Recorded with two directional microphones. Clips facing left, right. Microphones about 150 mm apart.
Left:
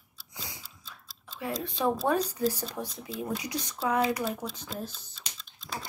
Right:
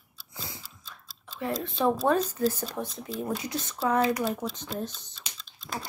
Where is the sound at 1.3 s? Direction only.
15° left (ahead or behind).